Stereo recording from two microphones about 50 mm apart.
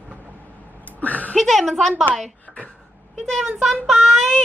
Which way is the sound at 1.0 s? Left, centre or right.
Left.